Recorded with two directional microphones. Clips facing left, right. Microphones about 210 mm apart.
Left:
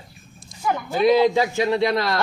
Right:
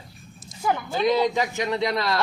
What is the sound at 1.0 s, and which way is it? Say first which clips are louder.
Speech: left 5 dB; 5° left (ahead or behind).